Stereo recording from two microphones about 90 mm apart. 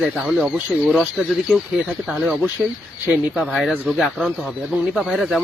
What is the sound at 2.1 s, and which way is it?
Speech, 20° right (ahead or behind).